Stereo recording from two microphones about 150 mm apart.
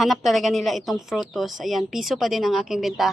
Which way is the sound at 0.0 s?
Centre (ahead or behind).